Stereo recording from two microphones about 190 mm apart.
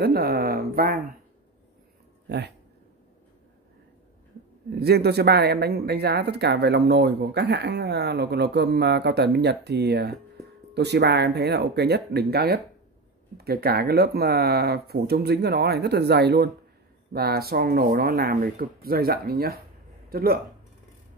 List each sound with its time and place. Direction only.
0.0 s a sound: 55° right (ahead or behind)
2.2 s speech: 60° right (ahead or behind)
4.7 s a man's voice: 55° right (ahead or behind)